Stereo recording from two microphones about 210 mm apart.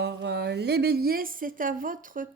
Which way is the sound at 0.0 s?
50° right (ahead or behind).